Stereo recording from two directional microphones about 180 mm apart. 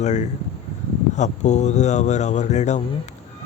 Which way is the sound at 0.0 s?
40° left (ahead or behind).